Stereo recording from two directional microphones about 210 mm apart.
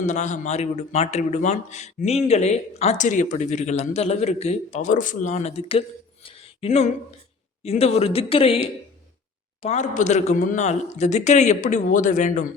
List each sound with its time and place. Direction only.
0.0 s a man's voice: 35° left (ahead or behind)
6.2 s a sound: 25° left (ahead or behind)
7.6 s a man's voice: 30° left (ahead or behind)